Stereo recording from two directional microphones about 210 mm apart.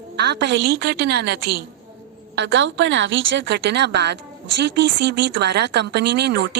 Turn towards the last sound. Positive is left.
turn(degrees=-50)  # may be behind; listen again after turning